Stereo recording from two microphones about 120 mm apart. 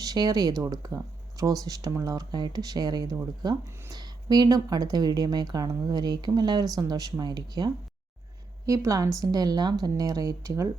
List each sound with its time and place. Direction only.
0.0 s speech: 30° right (ahead or behind)